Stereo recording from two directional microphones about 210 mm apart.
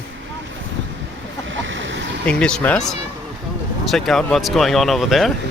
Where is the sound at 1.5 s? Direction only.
65° right (ahead or behind).